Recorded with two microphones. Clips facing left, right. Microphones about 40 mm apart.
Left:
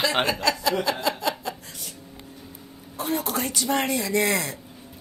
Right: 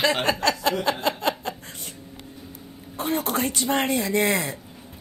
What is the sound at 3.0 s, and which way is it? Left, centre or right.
Speech, right.